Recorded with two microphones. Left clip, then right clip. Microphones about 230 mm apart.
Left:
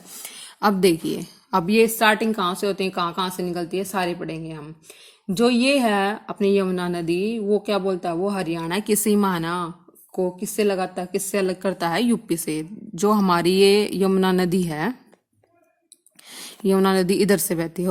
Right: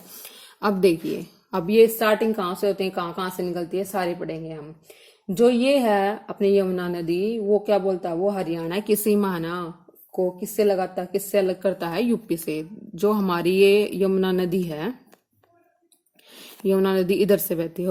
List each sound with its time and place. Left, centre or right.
0.2 s a woman's voice: left
16.3 s speech: left